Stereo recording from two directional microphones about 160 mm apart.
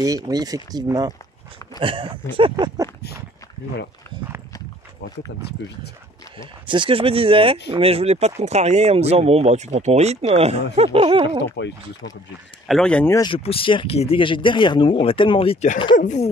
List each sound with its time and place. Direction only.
0.0 s speech: 20° right (ahead or behind)
2.5 s speech: 20° right (ahead or behind)
6.3 s speech: 30° right (ahead or behind)
11.6 s speech: 90° left
12.6 s speech: 5° left (ahead or behind)
13.1 s speech: 25° left (ahead or behind)
16.0 s speech: 50° left (ahead or behind)